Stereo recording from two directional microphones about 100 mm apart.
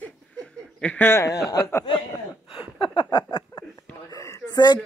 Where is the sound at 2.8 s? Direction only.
55° left (ahead or behind).